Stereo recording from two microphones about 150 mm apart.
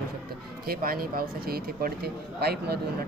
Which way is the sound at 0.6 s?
80° right.